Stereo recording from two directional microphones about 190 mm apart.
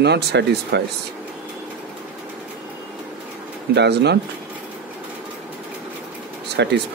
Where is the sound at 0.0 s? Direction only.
65° right (ahead or behind).